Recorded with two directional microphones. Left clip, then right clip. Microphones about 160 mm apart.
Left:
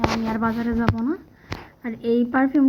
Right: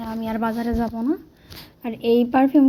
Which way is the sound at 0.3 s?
15° right (ahead or behind).